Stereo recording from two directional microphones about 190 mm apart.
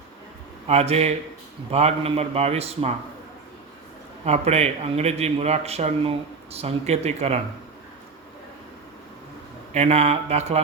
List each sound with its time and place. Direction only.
0.7 s a man's voice: 35° right (ahead or behind)
4.3 s a man's voice: 35° right (ahead or behind)
9.7 s a man's voice: 35° right (ahead or behind)